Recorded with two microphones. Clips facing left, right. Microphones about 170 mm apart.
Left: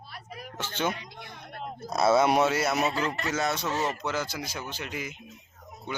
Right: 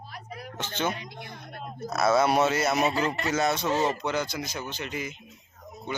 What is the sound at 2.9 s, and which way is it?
Speech, 15° right (ahead or behind).